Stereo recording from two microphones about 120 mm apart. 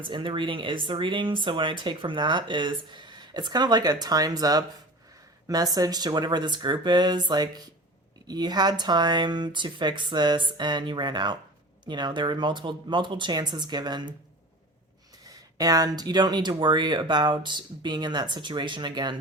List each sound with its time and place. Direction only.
0.0 s speech: 45° right (ahead or behind)
15.5 s speech: 30° right (ahead or behind)